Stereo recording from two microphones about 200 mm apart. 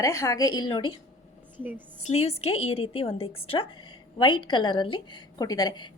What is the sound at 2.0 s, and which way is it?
A woman's voice, 30° left (ahead or behind).